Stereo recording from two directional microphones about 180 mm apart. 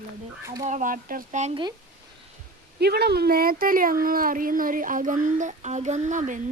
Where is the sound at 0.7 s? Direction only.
45° right (ahead or behind).